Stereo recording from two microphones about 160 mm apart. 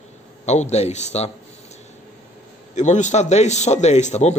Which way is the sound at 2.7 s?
50° left (ahead or behind).